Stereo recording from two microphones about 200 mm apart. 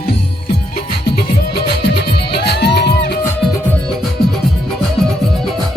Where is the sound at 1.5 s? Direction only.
55° left (ahead or behind).